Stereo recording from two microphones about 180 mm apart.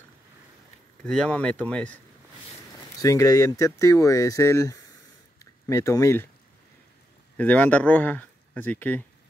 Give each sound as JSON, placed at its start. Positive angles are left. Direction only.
{"t": 1.0, "sound": "speech", "side_deg": 5}
{"t": 3.0, "sound": "speech", "side_deg": 20}
{"t": 7.3, "sound": "speech", "side_deg": 10}